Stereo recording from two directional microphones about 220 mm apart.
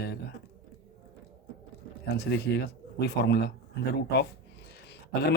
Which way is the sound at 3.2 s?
50° left (ahead or behind).